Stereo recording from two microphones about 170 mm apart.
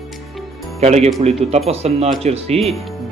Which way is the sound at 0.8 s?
40° right (ahead or behind).